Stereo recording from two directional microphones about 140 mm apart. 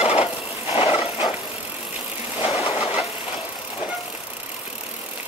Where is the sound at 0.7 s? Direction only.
40° left (ahead or behind).